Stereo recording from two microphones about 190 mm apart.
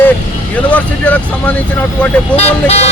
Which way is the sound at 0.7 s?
5° left (ahead or behind).